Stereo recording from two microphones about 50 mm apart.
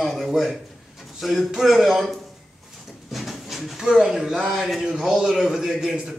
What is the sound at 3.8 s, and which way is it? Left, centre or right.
Speech, centre.